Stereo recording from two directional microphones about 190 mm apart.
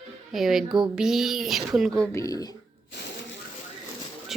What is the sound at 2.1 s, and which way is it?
Speech, 20° left (ahead or behind).